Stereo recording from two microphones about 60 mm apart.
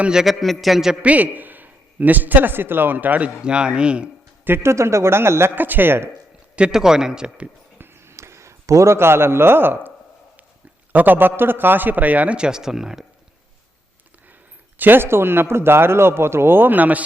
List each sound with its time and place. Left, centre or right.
0.1 s a man's voice: centre
0.3 s a man's voice: centre
1.0 s a man's voice: right
4.4 s speech: right
5.5 s a man's voice: right
6.6 s a man's voice: centre
7.8 s a sound: right
10.9 s a man's voice: right; by 13.1 s centre
14.8 s a man's voice: right